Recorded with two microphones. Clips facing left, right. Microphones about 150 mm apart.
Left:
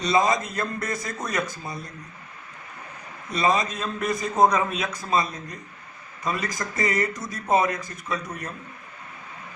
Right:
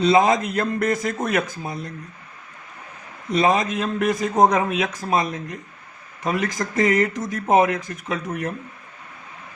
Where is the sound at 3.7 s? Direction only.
90° right.